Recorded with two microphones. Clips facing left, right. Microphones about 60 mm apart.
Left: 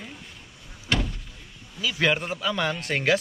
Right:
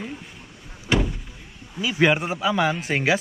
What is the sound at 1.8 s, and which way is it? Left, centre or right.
Speech, centre.